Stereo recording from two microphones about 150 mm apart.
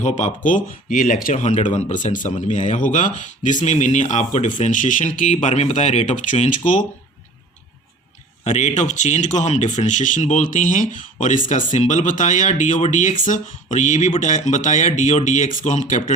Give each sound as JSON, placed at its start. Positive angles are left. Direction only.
{"t": 0.0, "sound": "speech", "side_deg": 55}
{"t": 8.4, "sound": "speech", "side_deg": 50}